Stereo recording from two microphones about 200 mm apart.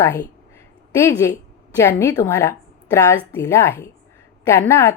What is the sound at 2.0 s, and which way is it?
A woman's voice, 15° left (ahead or behind).